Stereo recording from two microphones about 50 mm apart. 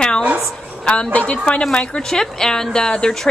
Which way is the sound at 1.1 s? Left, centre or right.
Left.